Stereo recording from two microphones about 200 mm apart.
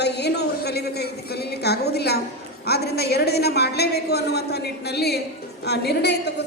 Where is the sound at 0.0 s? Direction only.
55° left (ahead or behind).